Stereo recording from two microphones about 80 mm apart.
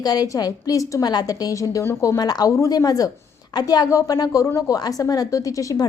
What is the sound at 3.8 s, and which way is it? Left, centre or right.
A woman's voice, left.